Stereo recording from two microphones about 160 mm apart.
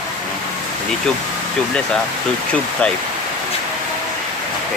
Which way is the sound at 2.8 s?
5° left (ahead or behind).